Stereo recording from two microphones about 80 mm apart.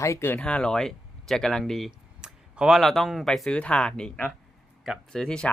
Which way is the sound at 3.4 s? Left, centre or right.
Centre.